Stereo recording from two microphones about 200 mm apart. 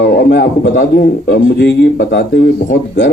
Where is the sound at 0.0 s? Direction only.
55° left (ahead or behind).